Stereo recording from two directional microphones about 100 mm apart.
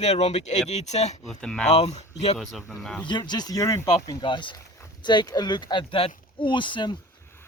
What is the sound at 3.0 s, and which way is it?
Speech, 50° left (ahead or behind).